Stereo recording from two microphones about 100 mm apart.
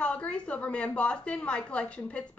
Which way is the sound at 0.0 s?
10° left (ahead or behind).